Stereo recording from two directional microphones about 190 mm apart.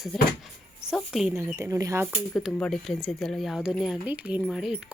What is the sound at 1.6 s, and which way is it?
Speech, 15° right (ahead or behind).